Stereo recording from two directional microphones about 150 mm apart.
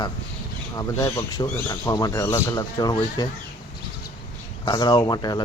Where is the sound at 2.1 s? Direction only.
15° left (ahead or behind).